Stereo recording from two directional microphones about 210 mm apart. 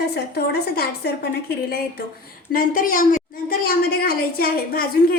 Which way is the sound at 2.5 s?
40° left (ahead or behind).